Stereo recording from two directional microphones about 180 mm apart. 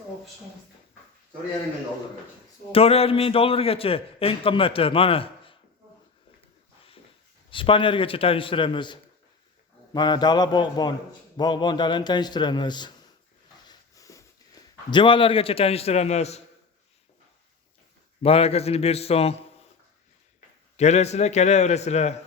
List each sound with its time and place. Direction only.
2.7 s a man's voice: 35° left (ahead or behind)
7.5 s a man's voice: 30° left (ahead or behind)
13.7 s a sound: 20° left (ahead or behind)
14.8 s a man's voice: 25° left (ahead or behind)
18.2 s a man's voice: 35° left (ahead or behind)
20.7 s a man's voice: 40° left (ahead or behind)